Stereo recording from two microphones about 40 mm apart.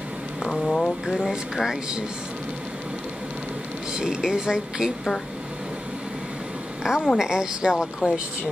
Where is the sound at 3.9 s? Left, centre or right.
Centre.